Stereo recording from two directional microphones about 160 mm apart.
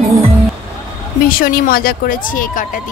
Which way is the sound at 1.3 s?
65° left (ahead or behind).